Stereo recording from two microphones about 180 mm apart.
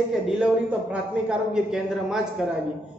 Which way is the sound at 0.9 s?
5° right (ahead or behind).